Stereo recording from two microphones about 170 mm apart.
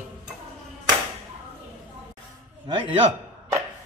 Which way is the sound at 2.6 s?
30° right (ahead or behind).